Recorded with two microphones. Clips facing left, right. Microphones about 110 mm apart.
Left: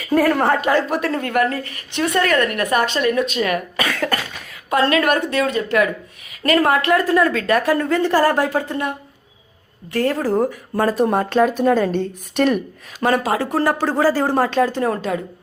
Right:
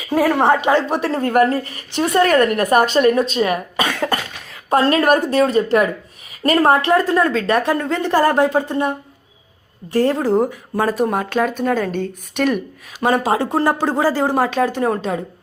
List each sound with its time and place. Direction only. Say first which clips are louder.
0.1 s speech: right 1 dB; 10° right (ahead or behind)
0.9 s a woman's voice: right 2 dB; 30° right (ahead or behind)
4.7 s a woman's voice: right 2 dB; 35° right (ahead or behind); by 10.6 s 20° right (ahead or behind)
10.8 s speech: left 1 dB; 5° right (ahead or behind)
13.0 s a woman's voice: right 1 dB; 20° right (ahead or behind)